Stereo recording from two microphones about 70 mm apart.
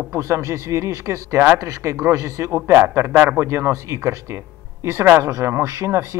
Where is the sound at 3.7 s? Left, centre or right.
Right.